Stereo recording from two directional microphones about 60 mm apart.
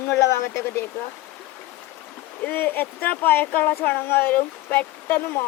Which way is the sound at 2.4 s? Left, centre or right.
Left.